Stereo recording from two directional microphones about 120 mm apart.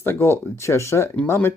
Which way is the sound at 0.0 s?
20° left (ahead or behind).